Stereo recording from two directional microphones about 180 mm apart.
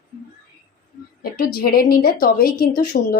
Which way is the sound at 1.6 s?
55° left (ahead or behind).